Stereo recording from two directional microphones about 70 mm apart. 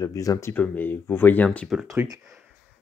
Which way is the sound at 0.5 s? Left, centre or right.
Left.